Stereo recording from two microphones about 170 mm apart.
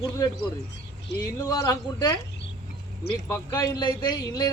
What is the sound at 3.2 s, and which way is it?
Speech, 20° left (ahead or behind).